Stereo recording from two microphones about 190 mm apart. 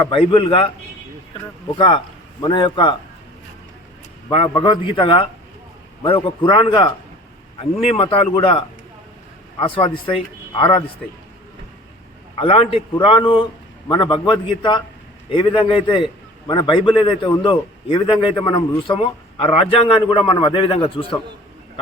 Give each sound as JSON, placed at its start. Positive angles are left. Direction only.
{"t": 0.1, "sound": "a man's voice", "side_deg": 25}
{"t": 2.4, "sound": "a man's voice", "side_deg": 25}
{"t": 4.3, "sound": "a man's voice", "side_deg": 25}
{"t": 12.4, "sound": "a man's voice", "side_deg": 30}